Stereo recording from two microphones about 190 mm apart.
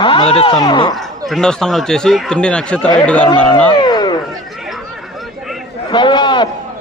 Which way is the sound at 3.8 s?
20° left (ahead or behind).